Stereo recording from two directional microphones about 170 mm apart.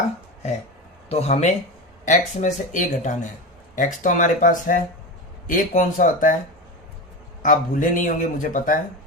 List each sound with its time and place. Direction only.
1.1 s speech: 40° left (ahead or behind)
7.4 s speech: 50° left (ahead or behind)